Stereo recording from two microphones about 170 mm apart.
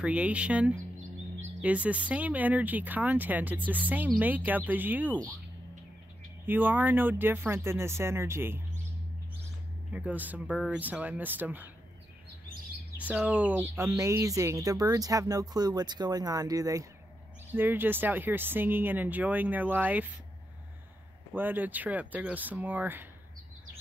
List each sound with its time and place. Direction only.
0.0 s speech: 5° right (ahead or behind)
6.4 s speech: 10° right (ahead or behind)
9.9 s speech: 10° right (ahead or behind)
13.1 s speech: 10° right (ahead or behind)
21.3 s speech: 10° right (ahead or behind)